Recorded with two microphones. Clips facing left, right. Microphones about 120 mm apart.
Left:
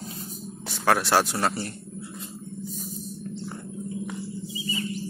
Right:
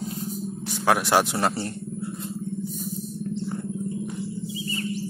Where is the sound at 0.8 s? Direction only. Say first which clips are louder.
Right 1 dB; 15° right (ahead or behind).